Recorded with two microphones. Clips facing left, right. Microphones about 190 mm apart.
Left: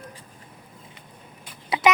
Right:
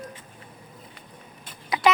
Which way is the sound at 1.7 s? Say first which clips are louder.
Left 1 dB; 30° left (ahead or behind).